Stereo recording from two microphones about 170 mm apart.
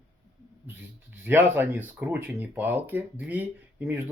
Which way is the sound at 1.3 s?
10° right (ahead or behind).